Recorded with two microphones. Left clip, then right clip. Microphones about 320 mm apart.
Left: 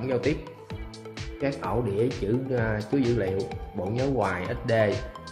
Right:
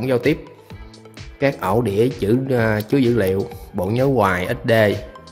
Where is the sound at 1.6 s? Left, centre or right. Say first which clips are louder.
Right 7 dB; right.